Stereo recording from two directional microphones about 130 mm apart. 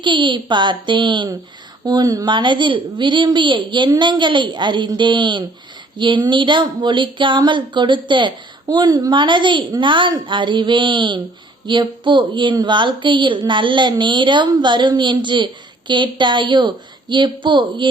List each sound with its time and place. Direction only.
0.0 s speech: 40° right (ahead or behind)